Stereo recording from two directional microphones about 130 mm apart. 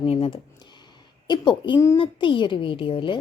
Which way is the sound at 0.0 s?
45° left (ahead or behind).